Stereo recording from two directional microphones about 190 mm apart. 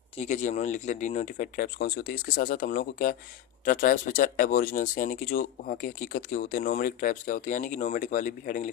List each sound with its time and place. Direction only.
0.2 s speech: 40° left (ahead or behind)